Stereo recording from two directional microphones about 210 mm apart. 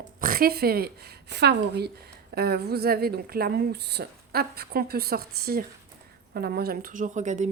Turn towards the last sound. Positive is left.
turn(degrees=-35)  # may be behind; listen again after turning